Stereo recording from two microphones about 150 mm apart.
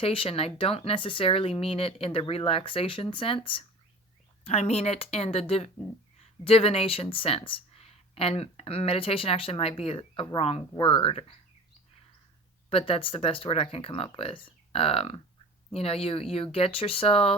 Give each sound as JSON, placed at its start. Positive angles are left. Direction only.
{"t": 0.0, "sound": "speech", "side_deg": 35}
{"t": 12.7, "sound": "speech", "side_deg": 35}